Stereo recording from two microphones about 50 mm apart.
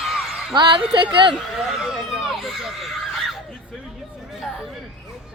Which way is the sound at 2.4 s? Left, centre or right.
Centre.